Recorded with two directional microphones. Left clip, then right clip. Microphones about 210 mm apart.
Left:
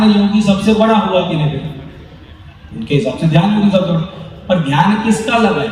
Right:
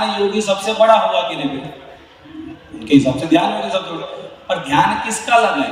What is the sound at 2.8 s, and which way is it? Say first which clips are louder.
A man's voice: right 2 dB; 50° right (ahead or behind).